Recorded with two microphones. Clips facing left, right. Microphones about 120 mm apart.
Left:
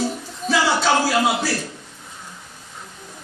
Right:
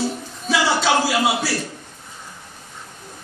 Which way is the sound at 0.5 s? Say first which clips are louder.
Even; 5° right (ahead or behind).